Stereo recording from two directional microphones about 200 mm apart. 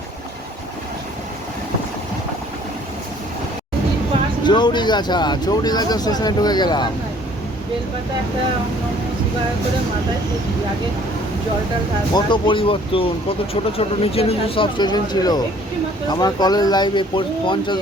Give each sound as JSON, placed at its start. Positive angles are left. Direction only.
{"t": 4.4, "sound": "speech", "side_deg": 20}
{"t": 12.1, "sound": "speech", "side_deg": 25}